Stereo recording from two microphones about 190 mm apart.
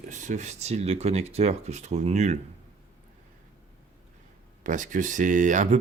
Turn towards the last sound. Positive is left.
turn(degrees=-40)  # may be behind; listen again after turning